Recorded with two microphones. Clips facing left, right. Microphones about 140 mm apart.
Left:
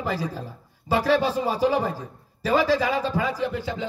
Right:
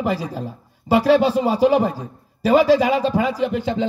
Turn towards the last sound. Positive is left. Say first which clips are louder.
# right 7 dB
turn(degrees=-20)  # may be behind; listen again after turning